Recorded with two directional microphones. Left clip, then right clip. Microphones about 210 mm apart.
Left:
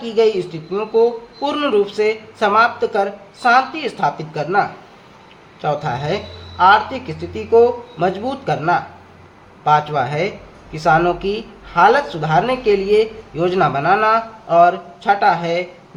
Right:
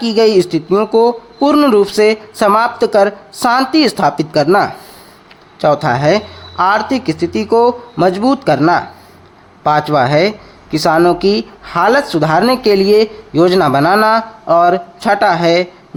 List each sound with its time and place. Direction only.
0.0 s speech: 50° right (ahead or behind)